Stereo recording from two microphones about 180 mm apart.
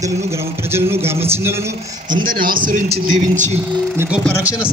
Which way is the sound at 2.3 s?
50° right (ahead or behind).